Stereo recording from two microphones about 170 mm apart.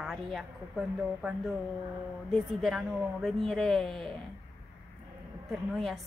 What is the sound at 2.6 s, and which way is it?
A woman's voice, centre (ahead or behind).